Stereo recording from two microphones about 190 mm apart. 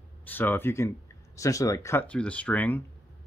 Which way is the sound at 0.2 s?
10° left (ahead or behind).